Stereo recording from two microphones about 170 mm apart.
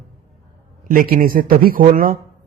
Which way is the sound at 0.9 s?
55° right (ahead or behind).